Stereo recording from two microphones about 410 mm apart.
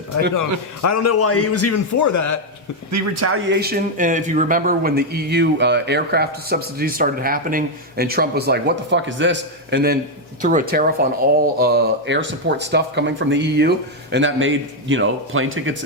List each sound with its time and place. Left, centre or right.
0.3 s a man's voice: left
2.9 s speech: right